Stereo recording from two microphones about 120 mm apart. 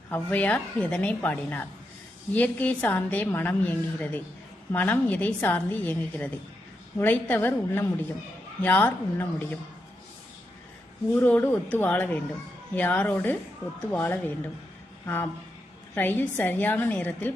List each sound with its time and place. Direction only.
0.1 s a woman's voice: 15° left (ahead or behind)
11.1 s a woman's voice: 15° left (ahead or behind)